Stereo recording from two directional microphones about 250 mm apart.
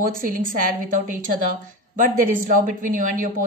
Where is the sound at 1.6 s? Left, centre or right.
Right.